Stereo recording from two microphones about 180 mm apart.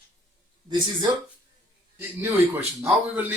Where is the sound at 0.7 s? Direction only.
20° right (ahead or behind).